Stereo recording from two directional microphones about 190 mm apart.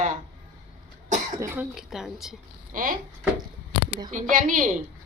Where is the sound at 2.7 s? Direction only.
45° right (ahead or behind).